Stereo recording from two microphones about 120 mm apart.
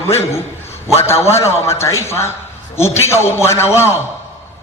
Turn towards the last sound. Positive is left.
turn(degrees=20)  # may be behind; listen again after turning